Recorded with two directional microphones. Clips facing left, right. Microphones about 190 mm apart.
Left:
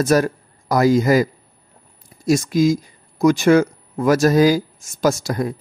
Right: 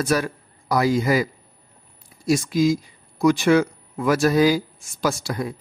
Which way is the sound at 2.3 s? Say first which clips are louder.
Left 3 dB; 45° left (ahead or behind).